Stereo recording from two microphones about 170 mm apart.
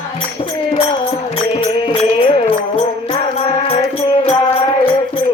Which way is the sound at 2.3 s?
30° left (ahead or behind).